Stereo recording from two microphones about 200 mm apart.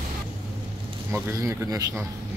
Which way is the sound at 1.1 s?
15° right (ahead or behind).